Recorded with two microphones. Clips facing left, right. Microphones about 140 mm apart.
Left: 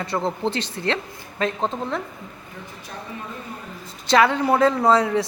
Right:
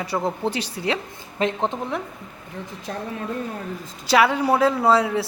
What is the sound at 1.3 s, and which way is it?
Speech, 20° right (ahead or behind).